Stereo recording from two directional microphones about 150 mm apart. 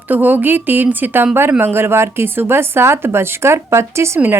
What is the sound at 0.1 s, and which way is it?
A woman's voice, 10° right (ahead or behind).